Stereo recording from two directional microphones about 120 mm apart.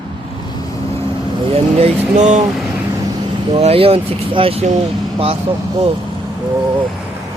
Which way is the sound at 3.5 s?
55° right (ahead or behind).